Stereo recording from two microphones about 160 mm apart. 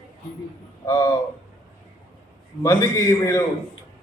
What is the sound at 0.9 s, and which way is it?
Speech, 25° left (ahead or behind).